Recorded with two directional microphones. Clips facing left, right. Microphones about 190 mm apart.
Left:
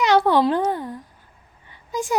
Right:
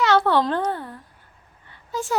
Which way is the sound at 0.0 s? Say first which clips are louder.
Left 2 dB; 15° left (ahead or behind).